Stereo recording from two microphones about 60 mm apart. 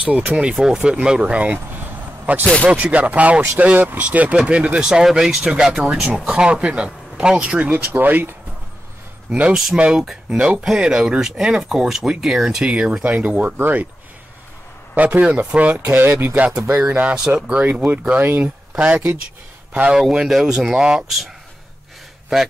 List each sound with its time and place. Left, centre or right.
0.0 s speech: right
1.0 s vehicle: centre
2.6 s speech: right
7.7 s speech: right
9.3 s speech: centre
13.0 s speech: right
15.0 s speech: right
16.3 s speech: centre
16.7 s speech: right
20.0 s speech: centre